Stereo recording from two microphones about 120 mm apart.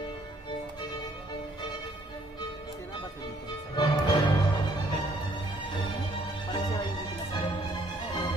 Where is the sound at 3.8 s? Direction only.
40° left (ahead or behind).